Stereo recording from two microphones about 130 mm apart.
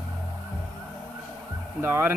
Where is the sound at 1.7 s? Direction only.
15° right (ahead or behind).